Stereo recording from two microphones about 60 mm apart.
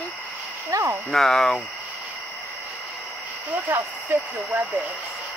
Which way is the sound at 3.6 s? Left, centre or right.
Right.